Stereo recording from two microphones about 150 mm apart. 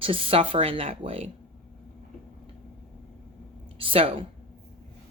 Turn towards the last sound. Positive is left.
turn(degrees=-35)  # may be behind; listen again after turning